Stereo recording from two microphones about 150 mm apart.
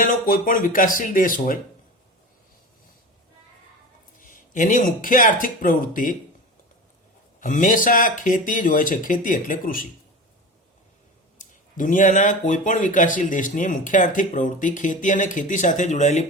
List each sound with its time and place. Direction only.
0.0 s speech: 65° left (ahead or behind)
4.2 s speech: 65° left (ahead or behind)
7.3 s speech: 60° left (ahead or behind)
11.3 s speech: 60° left (ahead or behind)